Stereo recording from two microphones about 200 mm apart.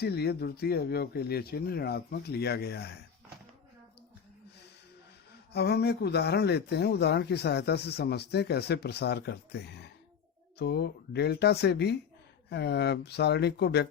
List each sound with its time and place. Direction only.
0.0 s speech: 55° left (ahead or behind)
5.5 s speech: 55° left (ahead or behind)